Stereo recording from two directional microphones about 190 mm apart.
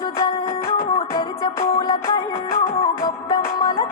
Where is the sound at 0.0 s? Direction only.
30° left (ahead or behind).